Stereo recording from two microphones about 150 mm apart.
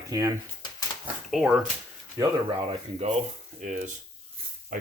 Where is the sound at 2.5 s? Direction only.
35° right (ahead or behind).